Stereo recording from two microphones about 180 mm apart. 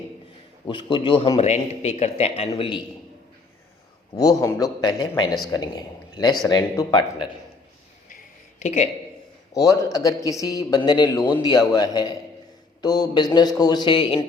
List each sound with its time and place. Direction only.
0.7 s a man's voice: 25° left (ahead or behind)
4.1 s a man's voice: 20° left (ahead or behind)
8.1 s a sound: 40° left (ahead or behind)
9.6 s speech: 20° left (ahead or behind)